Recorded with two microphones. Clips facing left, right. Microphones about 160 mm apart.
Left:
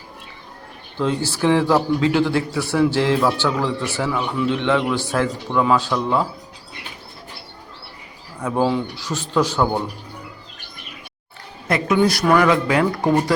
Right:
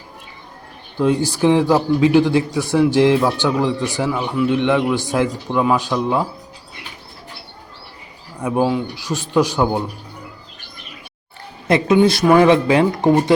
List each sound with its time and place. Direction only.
0.9 s a man's voice: 15° right (ahead or behind)
8.4 s a man's voice: 10° right (ahead or behind)
11.7 s speech: 25° right (ahead or behind)